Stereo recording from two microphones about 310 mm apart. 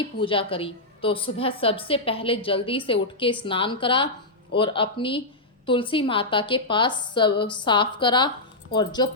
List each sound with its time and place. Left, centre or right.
0.0 s a woman's voice: centre